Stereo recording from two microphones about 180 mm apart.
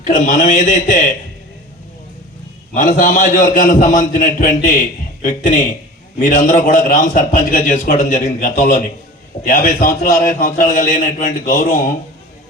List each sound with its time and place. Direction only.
0.0 s a man's voice: 45° left (ahead or behind)
2.7 s a man's voice: 50° left (ahead or behind)